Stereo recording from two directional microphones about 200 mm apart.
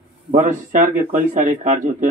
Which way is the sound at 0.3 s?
40° right (ahead or behind).